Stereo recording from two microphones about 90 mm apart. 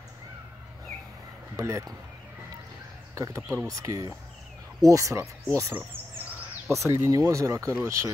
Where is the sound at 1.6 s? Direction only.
35° right (ahead or behind).